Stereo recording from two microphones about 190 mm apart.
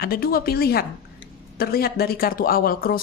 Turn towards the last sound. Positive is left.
turn(degrees=50)  # may be behind; listen again after turning